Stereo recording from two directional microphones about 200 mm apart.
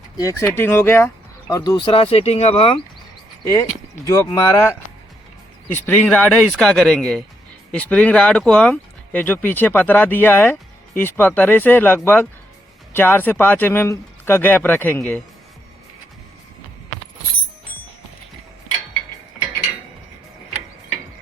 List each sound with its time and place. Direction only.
0.2 s speech: 15° left (ahead or behind)
3.4 s speech: 15° left (ahead or behind)
5.7 s speech: 10° left (ahead or behind)